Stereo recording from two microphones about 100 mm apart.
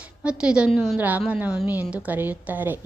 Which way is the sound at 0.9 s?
15° right (ahead or behind).